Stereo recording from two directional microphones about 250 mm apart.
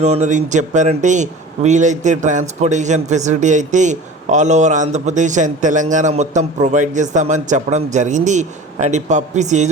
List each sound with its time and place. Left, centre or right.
0.0 s speech: right